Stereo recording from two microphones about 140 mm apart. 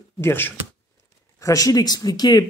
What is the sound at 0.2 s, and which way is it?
Speech, 15° left (ahead or behind).